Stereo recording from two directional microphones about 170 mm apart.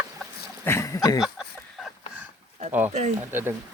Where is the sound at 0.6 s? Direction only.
15° left (ahead or behind).